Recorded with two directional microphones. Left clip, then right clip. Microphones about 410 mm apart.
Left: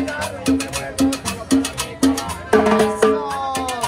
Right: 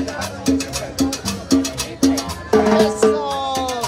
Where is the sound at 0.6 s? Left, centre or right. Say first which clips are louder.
Left 1 dB; left.